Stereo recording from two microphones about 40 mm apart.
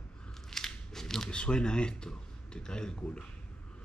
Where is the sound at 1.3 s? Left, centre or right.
Left.